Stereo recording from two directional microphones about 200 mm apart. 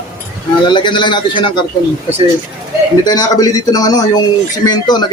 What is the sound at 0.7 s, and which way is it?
Speech, 25° left (ahead or behind).